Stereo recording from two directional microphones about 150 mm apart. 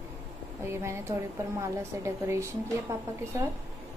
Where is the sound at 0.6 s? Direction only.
20° right (ahead or behind).